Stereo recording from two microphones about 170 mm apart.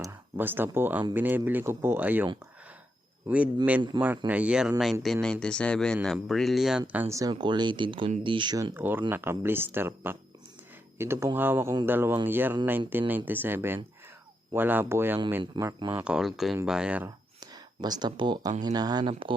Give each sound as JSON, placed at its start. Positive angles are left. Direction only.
{"t": 0.0, "sound": "speech", "side_deg": -15}
{"t": 3.2, "sound": "speech", "side_deg": -5}
{"t": 3.9, "sound": "speech", "side_deg": -30}
{"t": 4.3, "sound": "speech", "side_deg": -10}
{"t": 8.7, "sound": "speech", "side_deg": -10}
{"t": 17.4, "sound": "speech", "side_deg": -25}